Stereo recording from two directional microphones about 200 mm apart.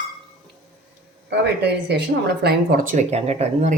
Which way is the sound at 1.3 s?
55° right (ahead or behind).